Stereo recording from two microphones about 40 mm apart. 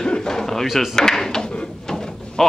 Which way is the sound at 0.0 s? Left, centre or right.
Centre.